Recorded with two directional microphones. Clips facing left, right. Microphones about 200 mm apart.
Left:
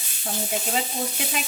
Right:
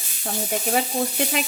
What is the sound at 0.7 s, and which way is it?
Frying, 55° right (ahead or behind).